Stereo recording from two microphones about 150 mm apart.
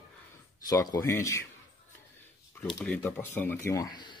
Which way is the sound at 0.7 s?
25° left (ahead or behind).